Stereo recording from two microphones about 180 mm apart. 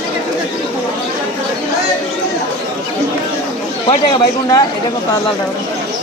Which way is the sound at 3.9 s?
25° left (ahead or behind).